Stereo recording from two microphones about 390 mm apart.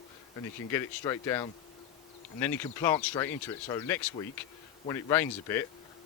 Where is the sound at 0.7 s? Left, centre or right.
Centre.